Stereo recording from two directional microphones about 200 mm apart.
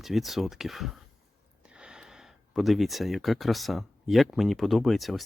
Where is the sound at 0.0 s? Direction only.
Centre (ahead or behind).